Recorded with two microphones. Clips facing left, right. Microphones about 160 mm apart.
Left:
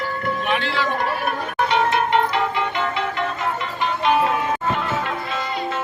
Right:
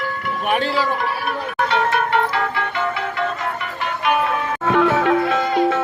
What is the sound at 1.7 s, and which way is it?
Music, 20° left (ahead or behind).